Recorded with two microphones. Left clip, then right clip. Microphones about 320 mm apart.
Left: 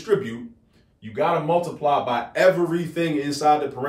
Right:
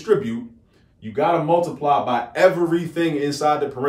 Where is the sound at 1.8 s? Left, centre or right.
Centre.